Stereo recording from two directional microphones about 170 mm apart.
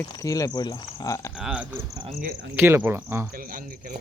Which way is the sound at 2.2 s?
65° right (ahead or behind).